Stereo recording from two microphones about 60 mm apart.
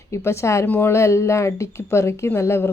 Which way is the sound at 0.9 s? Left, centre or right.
Left.